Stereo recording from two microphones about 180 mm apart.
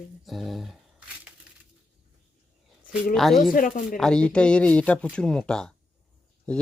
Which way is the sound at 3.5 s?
50° left (ahead or behind).